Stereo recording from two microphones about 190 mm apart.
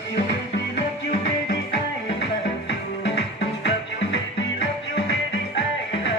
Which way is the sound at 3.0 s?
75° left (ahead or behind).